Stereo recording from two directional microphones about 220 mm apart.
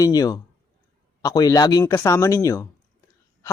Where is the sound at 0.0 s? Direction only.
15° left (ahead or behind).